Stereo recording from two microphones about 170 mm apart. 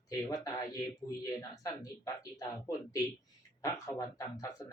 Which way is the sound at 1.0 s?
20° left (ahead or behind).